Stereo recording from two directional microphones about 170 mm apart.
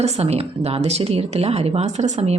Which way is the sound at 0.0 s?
40° right (ahead or behind).